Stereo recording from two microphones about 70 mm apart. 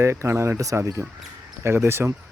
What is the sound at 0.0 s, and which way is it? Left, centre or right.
A man's voice, right.